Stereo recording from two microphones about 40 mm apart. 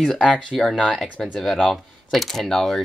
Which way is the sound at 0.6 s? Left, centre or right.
Centre.